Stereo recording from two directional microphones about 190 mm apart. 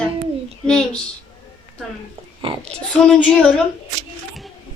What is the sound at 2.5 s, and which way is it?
Speech, 30° right (ahead or behind).